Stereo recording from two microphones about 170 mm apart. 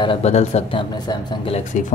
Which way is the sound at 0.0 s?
35° left (ahead or behind).